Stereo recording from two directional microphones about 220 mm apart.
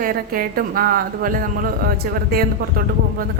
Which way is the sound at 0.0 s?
40° right (ahead or behind).